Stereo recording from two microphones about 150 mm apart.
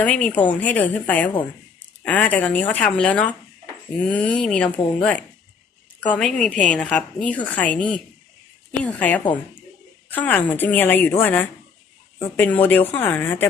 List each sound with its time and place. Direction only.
0.0 s a woman's voice: 10° left (ahead or behind)